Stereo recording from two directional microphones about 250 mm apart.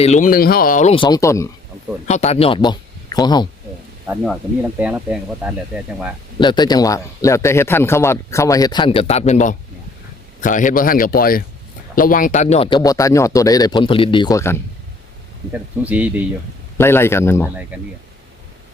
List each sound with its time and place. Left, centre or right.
0.0 s speech: left; by 1.5 s centre
2.0 s speech: left
4.0 s speech: centre
6.4 s speech: centre
15.5 s speech: centre
16.7 s speech: centre
17.7 s speech: centre